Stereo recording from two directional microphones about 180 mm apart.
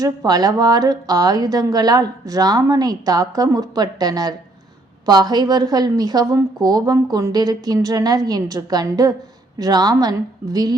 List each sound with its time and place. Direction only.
0.0 s a woman's voice: 20° right (ahead or behind)